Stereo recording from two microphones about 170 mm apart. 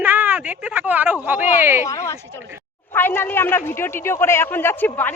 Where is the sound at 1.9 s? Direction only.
15° left (ahead or behind).